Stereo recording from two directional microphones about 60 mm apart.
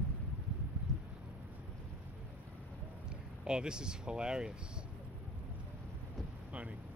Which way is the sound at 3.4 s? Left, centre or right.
Centre.